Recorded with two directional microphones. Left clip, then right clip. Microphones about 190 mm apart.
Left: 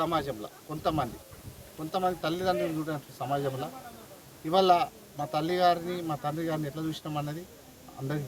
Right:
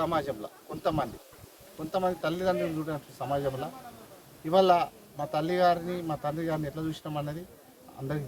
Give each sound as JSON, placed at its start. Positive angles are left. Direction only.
{"t": 0.0, "sound": "a man's voice", "side_deg": 0}